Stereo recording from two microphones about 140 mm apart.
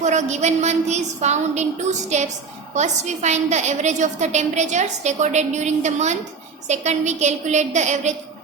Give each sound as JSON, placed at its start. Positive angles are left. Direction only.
{"t": 0.0, "sound": "a woman's voice", "side_deg": -55}